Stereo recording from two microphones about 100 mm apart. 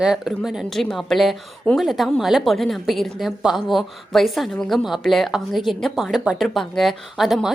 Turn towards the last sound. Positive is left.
turn(degrees=0)  # may be behind; listen again after turning